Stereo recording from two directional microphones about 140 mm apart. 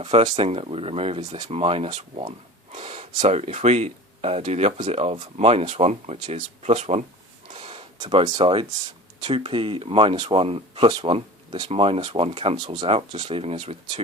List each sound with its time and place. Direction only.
0.0 s speech: 45° right (ahead or behind)
7.5 s a sound: 40° right (ahead or behind)
8.2 s speech: 35° right (ahead or behind)